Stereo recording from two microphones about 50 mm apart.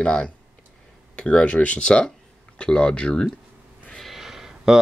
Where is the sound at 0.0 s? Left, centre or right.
Centre.